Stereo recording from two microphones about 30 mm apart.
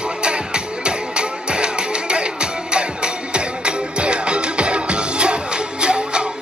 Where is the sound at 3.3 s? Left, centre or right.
Right.